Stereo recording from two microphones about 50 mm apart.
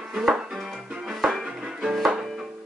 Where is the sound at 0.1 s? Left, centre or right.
Centre.